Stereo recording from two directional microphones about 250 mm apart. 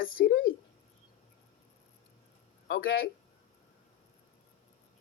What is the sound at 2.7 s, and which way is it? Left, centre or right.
Speech, left.